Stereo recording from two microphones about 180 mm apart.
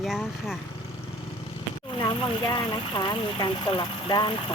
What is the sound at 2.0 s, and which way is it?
Speech, 20° left (ahead or behind).